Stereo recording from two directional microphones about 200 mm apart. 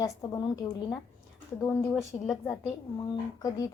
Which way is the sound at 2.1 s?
25° left (ahead or behind).